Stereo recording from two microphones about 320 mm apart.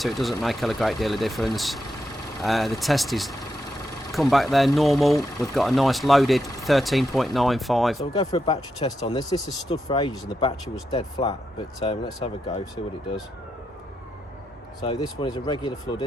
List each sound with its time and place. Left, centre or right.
0.0 s speech: centre
8.1 s speech: centre
14.8 s speech: centre